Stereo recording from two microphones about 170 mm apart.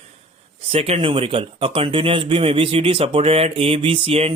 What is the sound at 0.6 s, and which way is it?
Speech, 35° right (ahead or behind).